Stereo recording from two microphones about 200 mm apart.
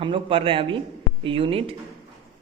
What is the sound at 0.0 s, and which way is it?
Speech, 25° right (ahead or behind).